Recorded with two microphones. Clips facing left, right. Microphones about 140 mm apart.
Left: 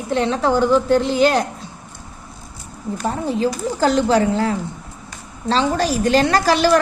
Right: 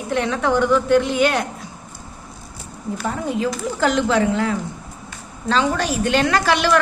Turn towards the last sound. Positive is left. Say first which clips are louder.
# left 2 dB
turn(degrees=35)  # may be behind; listen again after turning